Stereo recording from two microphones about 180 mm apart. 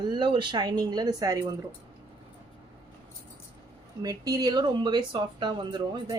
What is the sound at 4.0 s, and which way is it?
Speech, 20° right (ahead or behind).